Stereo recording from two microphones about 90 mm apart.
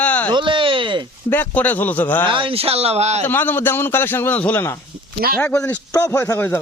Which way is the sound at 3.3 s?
20° left (ahead or behind).